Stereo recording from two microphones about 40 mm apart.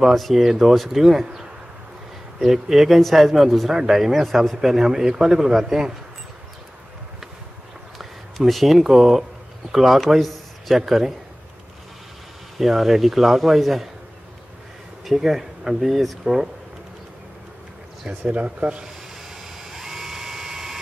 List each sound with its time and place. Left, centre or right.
0.0 s a man's voice: centre
1.2 s speech: centre
2.4 s a man's voice: centre
8.0 s a man's voice: centre
12.5 s a man's voice: centre
15.0 s a man's voice: centre
18.3 s speech: right
19.4 s a sound: centre